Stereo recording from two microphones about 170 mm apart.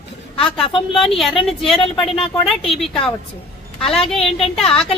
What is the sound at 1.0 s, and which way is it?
Speech, centre (ahead or behind).